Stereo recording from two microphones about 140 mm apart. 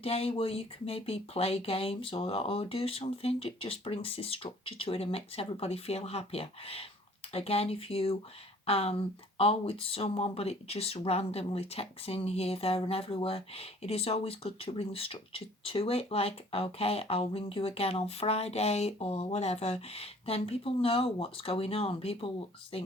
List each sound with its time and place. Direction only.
0.0 s speech: 45° left (ahead or behind)